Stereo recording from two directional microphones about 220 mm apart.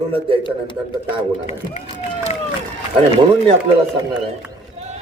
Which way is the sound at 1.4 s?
30° left (ahead or behind).